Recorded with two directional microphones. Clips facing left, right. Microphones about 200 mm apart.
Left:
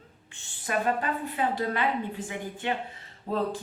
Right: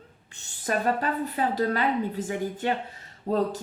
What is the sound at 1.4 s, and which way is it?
Speech, 40° right (ahead or behind).